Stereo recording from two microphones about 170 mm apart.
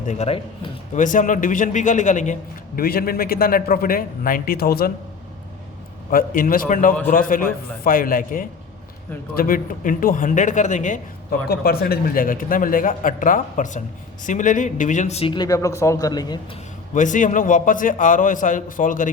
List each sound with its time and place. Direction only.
0.1 s speech: 35° left (ahead or behind)
0.9 s a man's voice: 50° left (ahead or behind)
6.1 s a man's voice: 55° left (ahead or behind)
11.4 s a man's voice: 65° left (ahead or behind); by 16.4 s 20° left (ahead or behind)
16.9 s a man's voice: 50° left (ahead or behind)